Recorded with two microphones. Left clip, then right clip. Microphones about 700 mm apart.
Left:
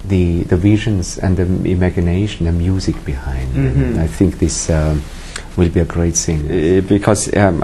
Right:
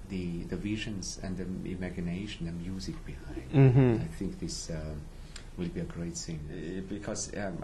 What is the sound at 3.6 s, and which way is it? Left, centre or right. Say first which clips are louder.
Speech: left 5 dB; right.